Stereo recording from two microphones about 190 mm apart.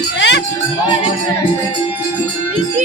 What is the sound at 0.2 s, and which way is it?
Music, 65° left (ahead or behind).